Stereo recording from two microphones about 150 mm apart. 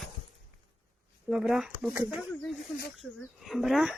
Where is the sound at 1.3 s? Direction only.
5° right (ahead or behind).